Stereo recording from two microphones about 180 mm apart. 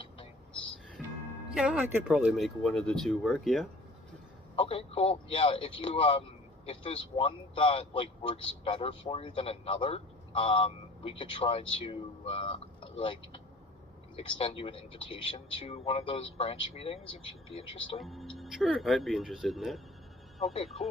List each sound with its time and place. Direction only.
1.0 s music: centre (ahead or behind)
1.5 s speech: 5° right (ahead or behind)
4.5 s a man's voice: 30° left (ahead or behind)
18.0 s speech: centre (ahead or behind)